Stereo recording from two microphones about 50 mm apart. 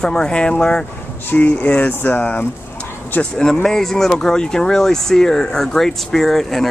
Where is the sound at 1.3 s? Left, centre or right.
Left.